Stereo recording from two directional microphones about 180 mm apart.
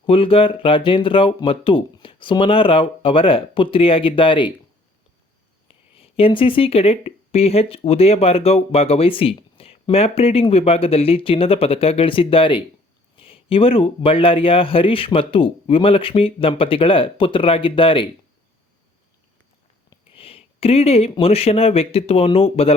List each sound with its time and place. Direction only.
0.0 s speech: 30° left (ahead or behind)
5.6 s speech: 30° left (ahead or behind)
19.9 s speech: 30° left (ahead or behind)